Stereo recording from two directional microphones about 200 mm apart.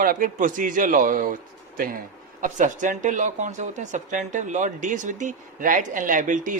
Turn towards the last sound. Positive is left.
turn(degrees=-40)  # may be behind; listen again after turning